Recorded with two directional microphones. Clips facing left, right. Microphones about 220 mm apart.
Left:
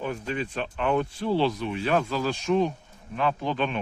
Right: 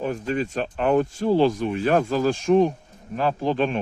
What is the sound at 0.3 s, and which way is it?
Speech, 45° right (ahead or behind).